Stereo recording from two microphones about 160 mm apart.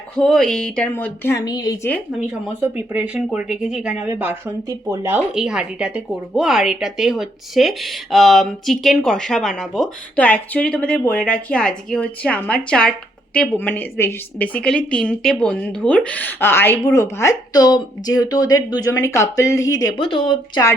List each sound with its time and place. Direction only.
0.2 s a woman's voice: 5° left (ahead or behind); by 1.9 s 25° left (ahead or behind)
2.2 s speech: 15° right (ahead or behind)
5.3 s a woman's voice: 5° right (ahead or behind); by 19.9 s 20° left (ahead or behind)
20.0 s speech: 35° left (ahead or behind)